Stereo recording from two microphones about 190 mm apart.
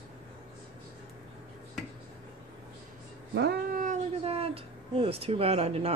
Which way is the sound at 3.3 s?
60° right (ahead or behind).